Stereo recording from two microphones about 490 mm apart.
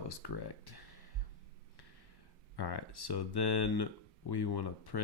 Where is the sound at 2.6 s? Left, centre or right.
Left.